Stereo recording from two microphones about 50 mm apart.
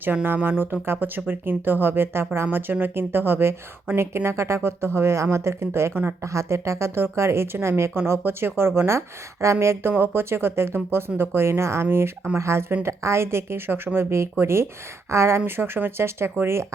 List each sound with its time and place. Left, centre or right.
0.4 s a woman's voice: right
6.2 s a woman's voice: right
8.9 s speech: right
9.9 s a woman's voice: right
12.8 s a woman's voice: right
15.4 s a woman's voice: right